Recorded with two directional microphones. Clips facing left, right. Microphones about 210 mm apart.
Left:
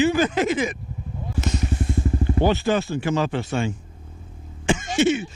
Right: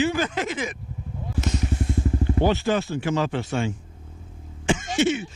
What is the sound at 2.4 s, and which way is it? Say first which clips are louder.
Speech: left 2 dB; 10° left (ahead or behind).